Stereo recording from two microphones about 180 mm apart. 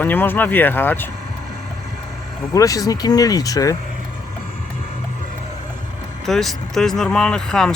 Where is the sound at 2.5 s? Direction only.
20° left (ahead or behind).